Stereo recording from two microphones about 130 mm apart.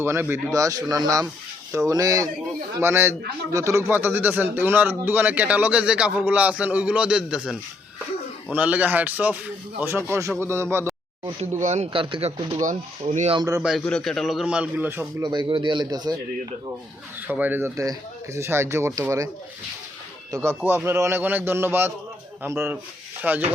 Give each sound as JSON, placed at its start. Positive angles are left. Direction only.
{"t": 0.0, "sound": "speech", "side_deg": -20}
{"t": 8.5, "sound": "speech", "side_deg": -10}
{"t": 11.6, "sound": "speech", "side_deg": -60}
{"t": 11.9, "sound": "speech", "side_deg": -40}
{"t": 12.6, "sound": "speech", "side_deg": -65}
{"t": 13.3, "sound": "speech", "side_deg": -30}
{"t": 13.6, "sound": "a man's voice", "side_deg": -5}
{"t": 13.8, "sound": "a man's voice", "side_deg": 5}
{"t": 15.2, "sound": "speech", "side_deg": -35}
{"t": 17.2, "sound": "speech", "side_deg": -15}
{"t": 20.3, "sound": "speech", "side_deg": -20}
{"t": 20.6, "sound": "speech", "side_deg": -5}
{"t": 20.8, "sound": "speech", "side_deg": -20}